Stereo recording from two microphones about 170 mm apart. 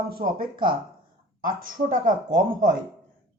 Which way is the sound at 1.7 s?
50° right (ahead or behind).